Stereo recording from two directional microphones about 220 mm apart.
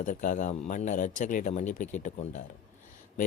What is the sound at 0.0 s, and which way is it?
Speech, 35° left (ahead or behind).